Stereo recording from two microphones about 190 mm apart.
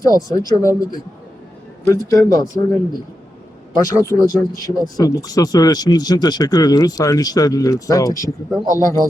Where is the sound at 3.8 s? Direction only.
15° left (ahead or behind).